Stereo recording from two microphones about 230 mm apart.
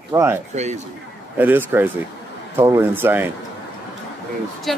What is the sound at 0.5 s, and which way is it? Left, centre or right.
Speech, right.